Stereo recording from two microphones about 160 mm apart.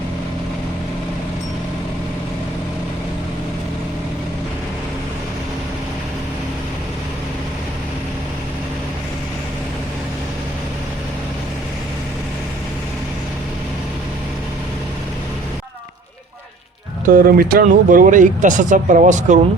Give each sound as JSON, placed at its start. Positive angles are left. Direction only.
{"t": 17.1, "sound": "speech", "side_deg": -65}